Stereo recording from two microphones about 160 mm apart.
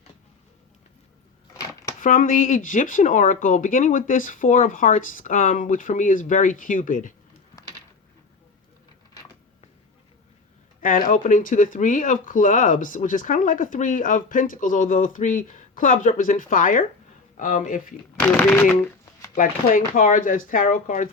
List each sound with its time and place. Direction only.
2.0 s speech: 55° left (ahead or behind)
10.8 s speech: 55° left (ahead or behind)
18.2 s speech: 15° left (ahead or behind)
19.4 s speech: 55° left (ahead or behind)